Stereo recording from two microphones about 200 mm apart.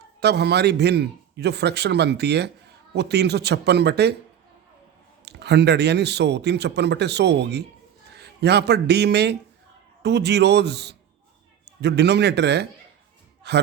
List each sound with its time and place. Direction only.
0.2 s speech: 55° right (ahead or behind)
5.2 s a man's voice: 55° right (ahead or behind)